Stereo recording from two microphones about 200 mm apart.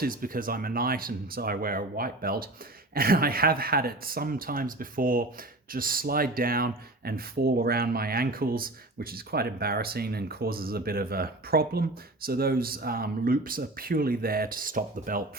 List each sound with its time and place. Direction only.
0.0 s speech: 45° right (ahead or behind)